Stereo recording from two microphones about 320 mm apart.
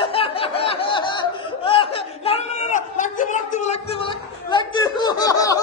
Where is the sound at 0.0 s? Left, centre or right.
Centre.